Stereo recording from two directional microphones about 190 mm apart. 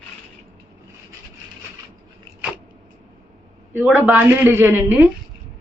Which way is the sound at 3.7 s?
10° right (ahead or behind).